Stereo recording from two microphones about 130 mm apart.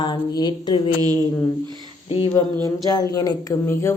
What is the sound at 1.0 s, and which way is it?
Speech, 30° right (ahead or behind).